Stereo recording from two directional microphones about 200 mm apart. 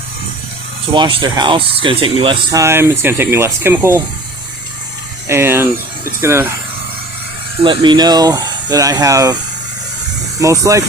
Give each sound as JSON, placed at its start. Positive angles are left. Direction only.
{"t": 0.9, "sound": "speech", "side_deg": -20}
{"t": 5.3, "sound": "speech", "side_deg": -10}
{"t": 7.6, "sound": "speech", "side_deg": -25}
{"t": 10.4, "sound": "speech", "side_deg": -15}